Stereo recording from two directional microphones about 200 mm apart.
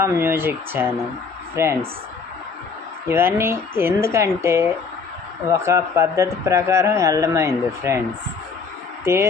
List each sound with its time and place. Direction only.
0.2 s a man's voice: 10° right (ahead or behind)
3.1 s a man's voice: 10° right (ahead or behind)